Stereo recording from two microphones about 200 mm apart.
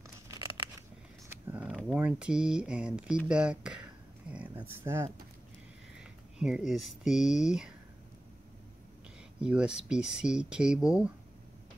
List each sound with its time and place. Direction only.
0.3 s scissors: 15° right (ahead or behind)
1.5 s mechanisms: 5° right (ahead or behind)
2.0 s speech: 5° right (ahead or behind)
9.4 s speech: 5° right (ahead or behind)